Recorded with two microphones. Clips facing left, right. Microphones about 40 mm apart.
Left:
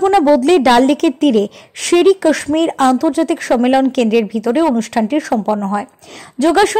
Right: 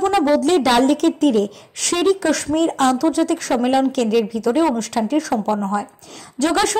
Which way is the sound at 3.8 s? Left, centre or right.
Left.